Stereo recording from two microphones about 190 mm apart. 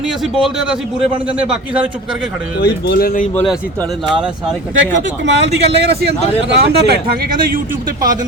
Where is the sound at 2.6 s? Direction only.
60° left (ahead or behind).